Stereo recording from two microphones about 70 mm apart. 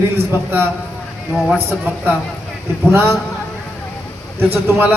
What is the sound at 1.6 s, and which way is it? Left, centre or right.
Speech, right.